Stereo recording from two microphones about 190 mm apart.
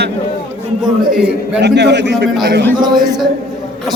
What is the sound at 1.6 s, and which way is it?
Speech, 65° right (ahead or behind).